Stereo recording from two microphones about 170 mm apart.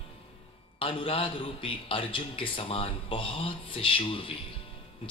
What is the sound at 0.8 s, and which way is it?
A man's voice, 30° left (ahead or behind).